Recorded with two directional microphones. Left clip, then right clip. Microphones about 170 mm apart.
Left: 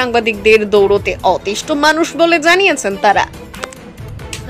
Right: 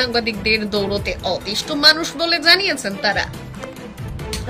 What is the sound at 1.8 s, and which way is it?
A woman's voice, 20° left (ahead or behind).